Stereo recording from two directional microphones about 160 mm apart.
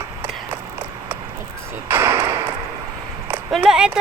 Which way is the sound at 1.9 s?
15° right (ahead or behind).